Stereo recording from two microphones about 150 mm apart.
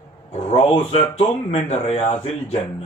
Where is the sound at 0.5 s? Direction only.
40° left (ahead or behind).